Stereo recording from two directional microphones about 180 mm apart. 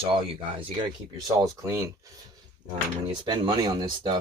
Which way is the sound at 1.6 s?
15° right (ahead or behind).